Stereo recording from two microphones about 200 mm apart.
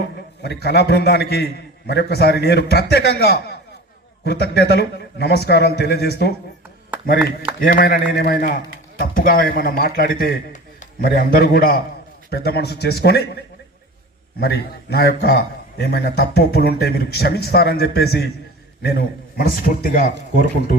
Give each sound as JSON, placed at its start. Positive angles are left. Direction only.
{"t": 0.4, "sound": "a man's voice", "side_deg": 55}
{"t": 6.9, "sound": "a sound", "side_deg": -10}
{"t": 7.6, "sound": "a man's voice", "side_deg": 45}